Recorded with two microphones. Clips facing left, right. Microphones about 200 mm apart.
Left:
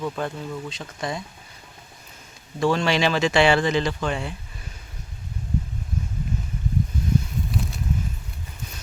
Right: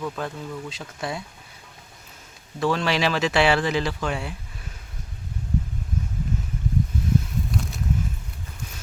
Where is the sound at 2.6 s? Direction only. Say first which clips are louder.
Left 2 dB; centre (ahead or behind).